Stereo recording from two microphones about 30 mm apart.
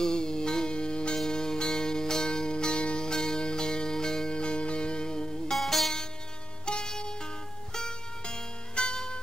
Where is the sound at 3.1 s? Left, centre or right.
Centre.